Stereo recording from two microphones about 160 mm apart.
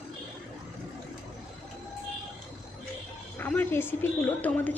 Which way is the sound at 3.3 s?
10° left (ahead or behind).